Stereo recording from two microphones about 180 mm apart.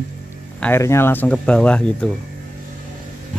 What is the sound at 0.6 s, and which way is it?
Speech, 15° left (ahead or behind).